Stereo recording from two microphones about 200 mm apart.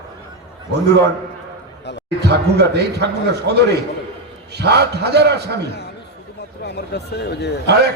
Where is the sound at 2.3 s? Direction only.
55° right (ahead or behind).